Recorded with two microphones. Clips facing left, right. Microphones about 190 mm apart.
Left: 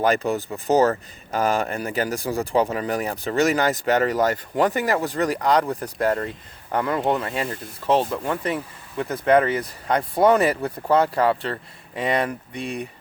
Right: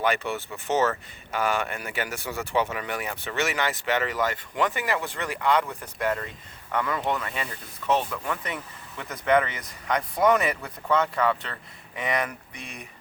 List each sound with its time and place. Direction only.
0.0 s speech: 40° left (ahead or behind)
7.9 s speech: 30° left (ahead or behind)